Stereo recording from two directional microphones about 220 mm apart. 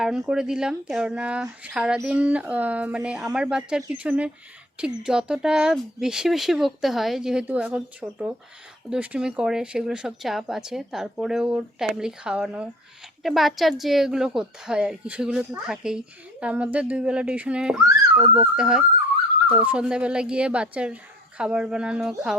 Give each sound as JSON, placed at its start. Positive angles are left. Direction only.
{"t": 0.0, "sound": "speech", "side_deg": -5}